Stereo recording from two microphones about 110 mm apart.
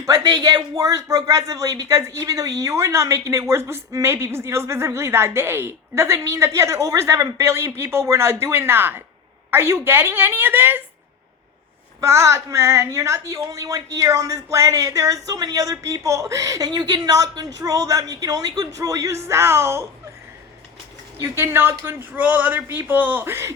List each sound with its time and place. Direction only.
0.0 s a woman's voice: 35° right (ahead or behind); by 10.8 s 20° right (ahead or behind)
11.9 s a woman's voice: 25° right (ahead or behind)
21.2 s a woman's voice: 25° right (ahead or behind)